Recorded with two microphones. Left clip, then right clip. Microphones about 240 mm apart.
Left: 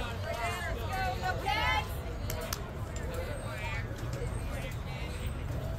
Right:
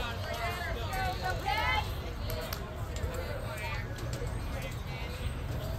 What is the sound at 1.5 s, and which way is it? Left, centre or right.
Vehicle, left.